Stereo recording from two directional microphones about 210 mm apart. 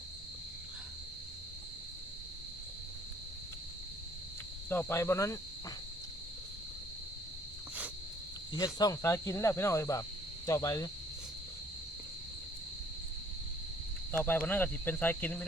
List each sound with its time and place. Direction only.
4.7 s cricket: 10° left (ahead or behind)
8.5 s cricket: 20° left (ahead or behind)
14.3 s cricket: 10° left (ahead or behind)